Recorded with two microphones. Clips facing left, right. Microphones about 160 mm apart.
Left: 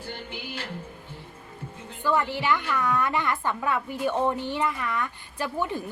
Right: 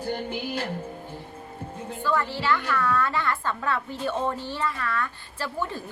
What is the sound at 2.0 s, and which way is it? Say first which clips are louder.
A child's voice: left 1 dB; 15° left (ahead or behind).